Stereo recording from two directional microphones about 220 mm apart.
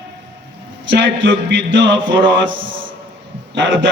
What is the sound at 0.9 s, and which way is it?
A man's voice, 55° right (ahead or behind).